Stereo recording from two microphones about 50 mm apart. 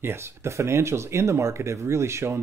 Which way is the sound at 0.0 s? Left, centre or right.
Right.